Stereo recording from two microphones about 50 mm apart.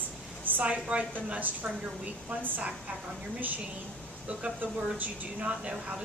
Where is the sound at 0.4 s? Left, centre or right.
Right.